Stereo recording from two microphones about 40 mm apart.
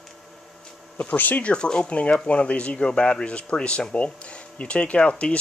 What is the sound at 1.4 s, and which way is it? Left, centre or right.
Speech, left.